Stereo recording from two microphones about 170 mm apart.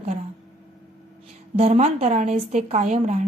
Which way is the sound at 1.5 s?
40° right (ahead or behind).